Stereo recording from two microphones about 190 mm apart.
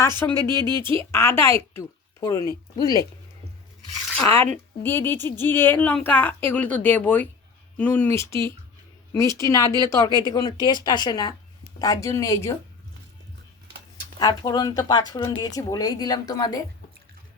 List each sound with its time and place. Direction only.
0.2 s a woman's voice: 10° left (ahead or behind)
0.4 s speech: 20° right (ahead or behind)
0.9 s speech: 15° left (ahead or behind)
4.8 s a woman's voice: 10° left (ahead or behind)
14.2 s speech: 20° left (ahead or behind)